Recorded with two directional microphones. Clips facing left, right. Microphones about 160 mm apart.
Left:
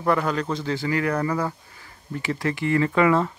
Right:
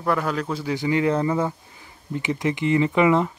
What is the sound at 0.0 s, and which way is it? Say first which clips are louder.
Speech: left 1 dB; centre (ahead or behind).